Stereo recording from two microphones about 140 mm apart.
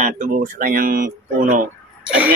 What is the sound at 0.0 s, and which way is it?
Speech, 75° right (ahead or behind).